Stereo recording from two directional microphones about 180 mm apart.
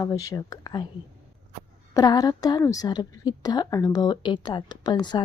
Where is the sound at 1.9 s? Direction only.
20° left (ahead or behind).